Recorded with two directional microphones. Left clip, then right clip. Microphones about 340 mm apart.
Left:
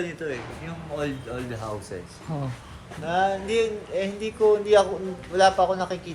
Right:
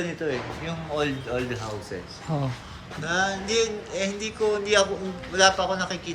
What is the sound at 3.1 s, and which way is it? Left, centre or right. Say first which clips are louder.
Speech: left 2 dB; centre.